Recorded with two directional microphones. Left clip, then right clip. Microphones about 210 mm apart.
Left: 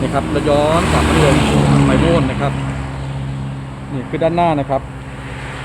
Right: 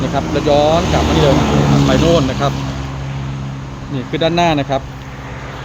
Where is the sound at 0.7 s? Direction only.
25° left (ahead or behind).